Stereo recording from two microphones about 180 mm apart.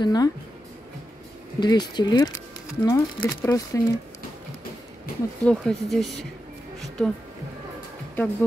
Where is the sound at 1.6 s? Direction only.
25° left (ahead or behind).